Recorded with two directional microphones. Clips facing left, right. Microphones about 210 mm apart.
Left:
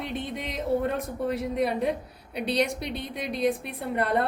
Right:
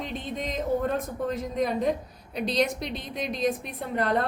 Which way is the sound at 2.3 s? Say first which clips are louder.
Even; 60° left (ahead or behind).